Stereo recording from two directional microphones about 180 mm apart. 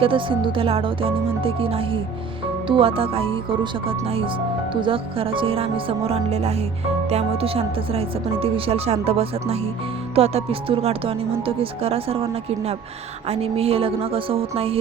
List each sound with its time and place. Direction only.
0.0 s speech: 30° right (ahead or behind)